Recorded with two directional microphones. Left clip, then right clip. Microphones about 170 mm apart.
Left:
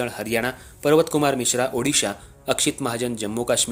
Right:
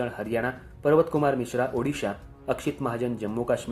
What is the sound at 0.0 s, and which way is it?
Speech, 40° left (ahead or behind).